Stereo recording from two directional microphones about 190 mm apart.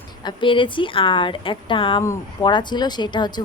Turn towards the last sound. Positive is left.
turn(degrees=25)  # may be behind; listen again after turning